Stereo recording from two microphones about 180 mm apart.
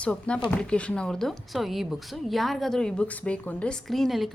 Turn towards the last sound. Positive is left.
turn(degrees=0)  # may be behind; listen again after turning